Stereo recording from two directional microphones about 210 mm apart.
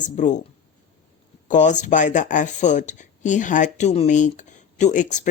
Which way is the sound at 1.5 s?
35° left (ahead or behind).